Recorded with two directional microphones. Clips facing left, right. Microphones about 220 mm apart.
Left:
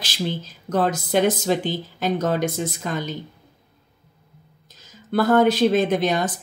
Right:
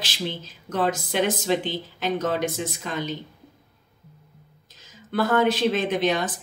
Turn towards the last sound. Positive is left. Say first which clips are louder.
# left 3 dB
turn(degrees=40)  # may be behind; listen again after turning